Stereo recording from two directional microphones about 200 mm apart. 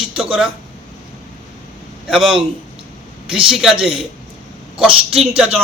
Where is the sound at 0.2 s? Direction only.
5° right (ahead or behind).